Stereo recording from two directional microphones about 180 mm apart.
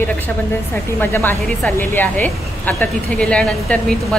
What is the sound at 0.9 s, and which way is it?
Speech, 10° left (ahead or behind).